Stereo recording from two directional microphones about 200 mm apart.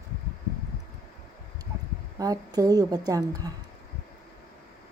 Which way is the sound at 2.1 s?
20° right (ahead or behind).